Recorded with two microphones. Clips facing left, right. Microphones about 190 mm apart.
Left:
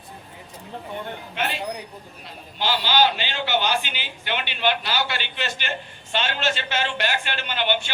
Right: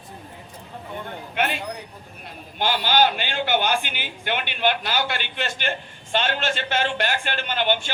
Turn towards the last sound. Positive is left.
turn(degrees=-45)  # may be behind; listen again after turning